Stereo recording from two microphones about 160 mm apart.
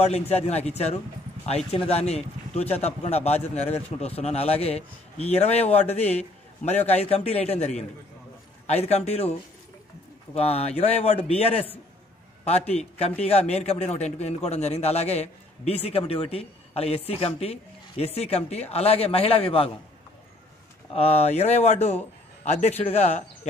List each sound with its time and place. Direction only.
0.0 s a man's voice: 40° left (ahead or behind)
10.3 s a man's voice: 40° left (ahead or behind)
20.9 s a man's voice: 40° left (ahead or behind)